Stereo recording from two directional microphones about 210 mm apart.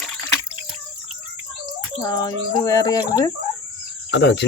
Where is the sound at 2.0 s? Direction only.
20° left (ahead or behind).